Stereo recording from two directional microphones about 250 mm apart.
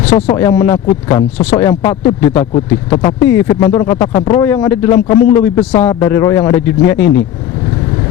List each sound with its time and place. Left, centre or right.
0.1 s speech: left
0.3 s speech: centre
2.9 s speech: left
3.2 s speech: centre